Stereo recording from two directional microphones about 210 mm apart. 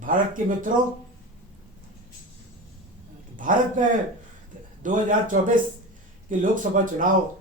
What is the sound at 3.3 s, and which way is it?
Speech, 40° right (ahead or behind).